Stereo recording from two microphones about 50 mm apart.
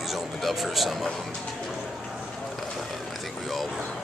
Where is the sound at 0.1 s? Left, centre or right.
Centre.